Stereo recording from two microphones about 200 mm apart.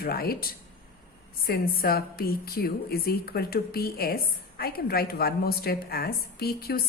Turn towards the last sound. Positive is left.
turn(degrees=50)  # may be behind; listen again after turning